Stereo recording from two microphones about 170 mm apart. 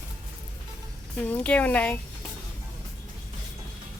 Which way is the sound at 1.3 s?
10° left (ahead or behind).